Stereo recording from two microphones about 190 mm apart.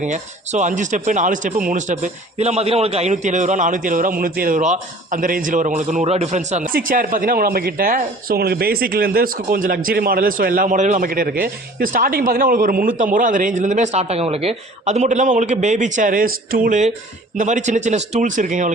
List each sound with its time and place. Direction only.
0.0 s speech: 40° right (ahead or behind)
11.1 s speech: 50° right (ahead or behind)